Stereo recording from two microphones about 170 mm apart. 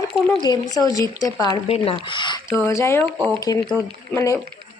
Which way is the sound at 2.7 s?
15° left (ahead or behind).